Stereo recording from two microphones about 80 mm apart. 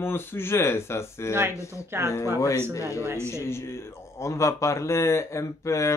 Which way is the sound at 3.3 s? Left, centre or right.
Left.